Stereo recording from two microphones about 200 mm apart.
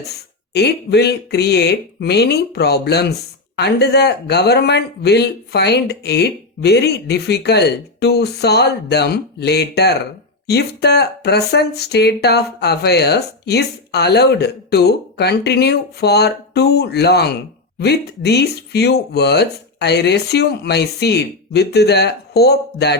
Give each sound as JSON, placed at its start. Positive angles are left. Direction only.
{"t": 0.5, "sound": "speech", "side_deg": 55}